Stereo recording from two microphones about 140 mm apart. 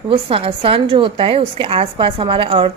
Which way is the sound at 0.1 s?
40° right (ahead or behind).